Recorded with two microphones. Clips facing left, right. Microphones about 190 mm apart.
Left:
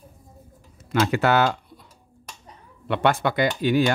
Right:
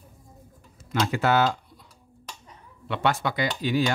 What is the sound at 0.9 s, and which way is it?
Speech, 70° left (ahead or behind).